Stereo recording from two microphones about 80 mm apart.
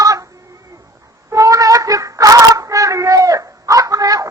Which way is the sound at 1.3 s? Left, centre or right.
Right.